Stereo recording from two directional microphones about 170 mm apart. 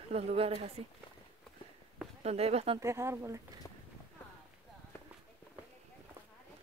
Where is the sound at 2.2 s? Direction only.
40° right (ahead or behind).